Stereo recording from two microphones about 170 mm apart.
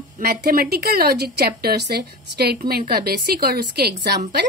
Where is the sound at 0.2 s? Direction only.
60° right (ahead or behind).